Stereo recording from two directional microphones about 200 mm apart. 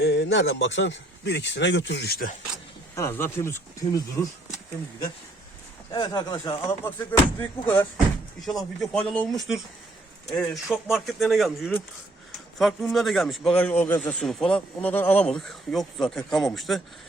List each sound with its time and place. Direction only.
0.0 s a man's voice: 55° left (ahead or behind)
2.9 s speech: 15° left (ahead or behind)
5.9 s speech: 20° left (ahead or behind); by 16.8 s centre (ahead or behind)